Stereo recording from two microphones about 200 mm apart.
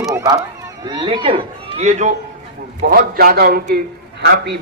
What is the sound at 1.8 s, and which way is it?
Speech, 35° right (ahead or behind).